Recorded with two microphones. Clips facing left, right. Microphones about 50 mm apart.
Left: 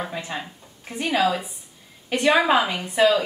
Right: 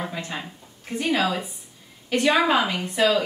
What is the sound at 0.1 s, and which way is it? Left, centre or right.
A woman's voice, centre.